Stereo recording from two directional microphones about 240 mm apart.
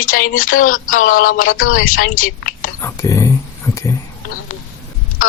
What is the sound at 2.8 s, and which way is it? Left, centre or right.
Speech, centre.